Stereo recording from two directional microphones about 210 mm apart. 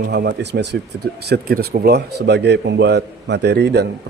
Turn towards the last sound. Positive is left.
turn(degrees=-50)  # may be behind; listen again after turning